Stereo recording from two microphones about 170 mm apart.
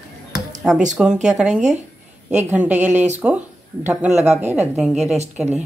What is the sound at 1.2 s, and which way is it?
Speech, 5° right (ahead or behind).